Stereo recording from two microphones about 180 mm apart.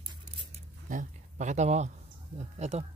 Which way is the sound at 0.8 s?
45° right (ahead or behind).